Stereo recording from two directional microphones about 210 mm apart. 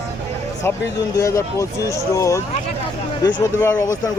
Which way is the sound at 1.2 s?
15° left (ahead or behind).